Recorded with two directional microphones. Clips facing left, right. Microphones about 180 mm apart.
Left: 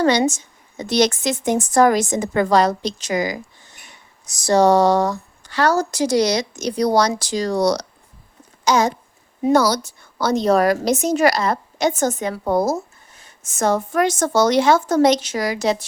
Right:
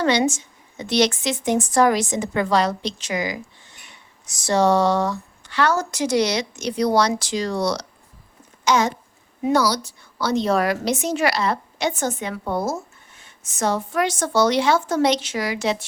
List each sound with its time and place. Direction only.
0.0 s a woman's voice: 40° left (ahead or behind)